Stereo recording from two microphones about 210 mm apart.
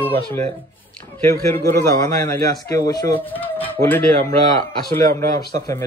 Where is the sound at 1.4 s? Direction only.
10° left (ahead or behind).